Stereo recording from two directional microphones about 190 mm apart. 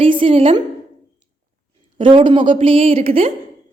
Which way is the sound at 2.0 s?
25° right (ahead or behind).